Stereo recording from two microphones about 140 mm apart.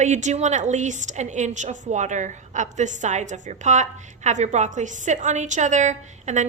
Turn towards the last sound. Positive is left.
turn(degrees=-60)  # may be behind; listen again after turning